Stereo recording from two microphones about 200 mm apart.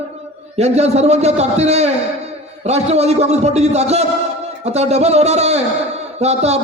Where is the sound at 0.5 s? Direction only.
30° right (ahead or behind).